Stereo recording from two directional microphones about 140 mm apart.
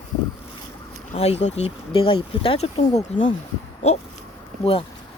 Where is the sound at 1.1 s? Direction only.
50° left (ahead or behind).